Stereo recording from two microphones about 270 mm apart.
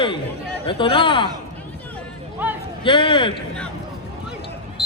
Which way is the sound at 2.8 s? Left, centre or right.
Centre.